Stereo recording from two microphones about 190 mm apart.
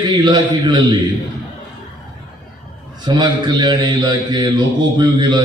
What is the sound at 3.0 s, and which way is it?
A man's voice, 25° right (ahead or behind).